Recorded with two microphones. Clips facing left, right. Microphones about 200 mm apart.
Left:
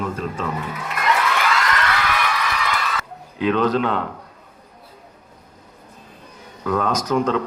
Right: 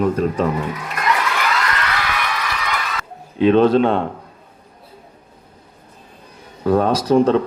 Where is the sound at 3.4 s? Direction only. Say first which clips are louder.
Right 6 dB; 25° right (ahead or behind).